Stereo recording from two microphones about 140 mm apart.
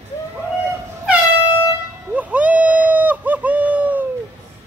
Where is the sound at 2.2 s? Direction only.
10° right (ahead or behind).